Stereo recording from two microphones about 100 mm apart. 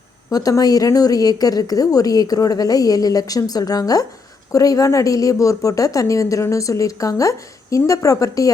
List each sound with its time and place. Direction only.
0.3 s speech: 35° left (ahead or behind)